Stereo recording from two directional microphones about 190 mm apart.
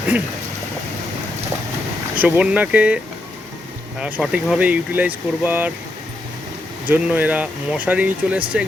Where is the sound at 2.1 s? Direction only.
5° right (ahead or behind).